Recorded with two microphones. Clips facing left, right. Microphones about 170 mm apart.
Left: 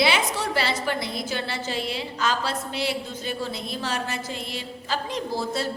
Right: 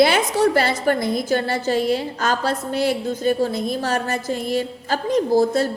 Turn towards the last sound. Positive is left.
turn(degrees=-45)  # may be behind; listen again after turning